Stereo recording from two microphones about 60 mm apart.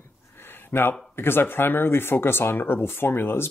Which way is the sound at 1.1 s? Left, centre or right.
Left.